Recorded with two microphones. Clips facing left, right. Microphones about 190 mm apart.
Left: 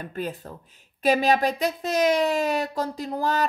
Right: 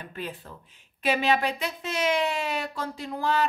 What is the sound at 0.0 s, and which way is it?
Speech, 45° left (ahead or behind).